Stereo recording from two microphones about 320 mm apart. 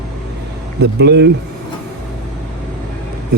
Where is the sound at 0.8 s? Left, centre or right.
Right.